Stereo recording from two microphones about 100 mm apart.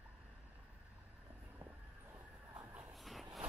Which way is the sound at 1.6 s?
20° right (ahead or behind).